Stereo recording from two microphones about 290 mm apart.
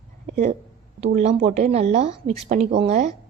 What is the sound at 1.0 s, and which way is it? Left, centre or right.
A woman's voice, right.